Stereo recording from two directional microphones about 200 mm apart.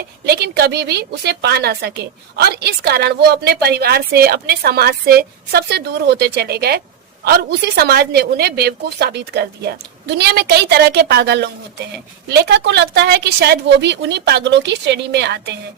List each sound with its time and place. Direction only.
0.3 s a woman's voice: 55° right (ahead or behind)